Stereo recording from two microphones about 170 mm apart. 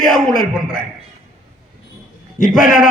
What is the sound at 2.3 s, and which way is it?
Speech, 55° left (ahead or behind).